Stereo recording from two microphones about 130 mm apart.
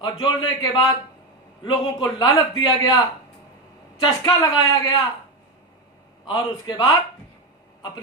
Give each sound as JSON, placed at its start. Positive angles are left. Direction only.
{"t": 0.0, "sound": "a man's voice", "side_deg": 30}
{"t": 4.0, "sound": "speech", "side_deg": 30}
{"t": 6.2, "sound": "a man's voice", "side_deg": 35}